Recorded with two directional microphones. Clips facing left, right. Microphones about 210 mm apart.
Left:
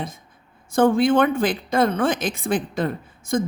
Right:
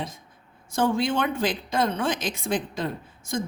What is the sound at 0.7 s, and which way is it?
Speech, 55° left (ahead or behind).